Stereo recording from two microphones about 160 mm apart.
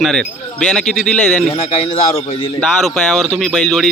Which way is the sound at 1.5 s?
40° left (ahead or behind).